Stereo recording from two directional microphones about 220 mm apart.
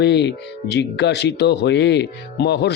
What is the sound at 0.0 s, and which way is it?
Speech, 50° left (ahead or behind).